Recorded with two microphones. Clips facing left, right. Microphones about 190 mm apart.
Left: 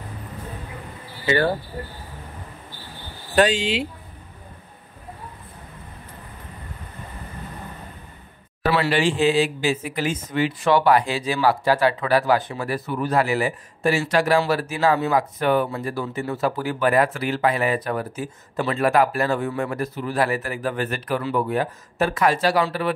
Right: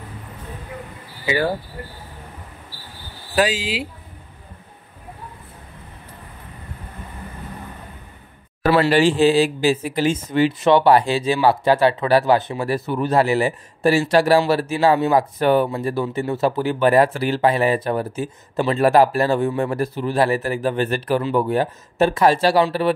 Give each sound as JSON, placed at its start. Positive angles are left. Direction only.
{"t": 1.2, "sound": "speech", "side_deg": -10}
{"t": 3.3, "sound": "speech", "side_deg": -5}
{"t": 8.8, "sound": "speech", "side_deg": -35}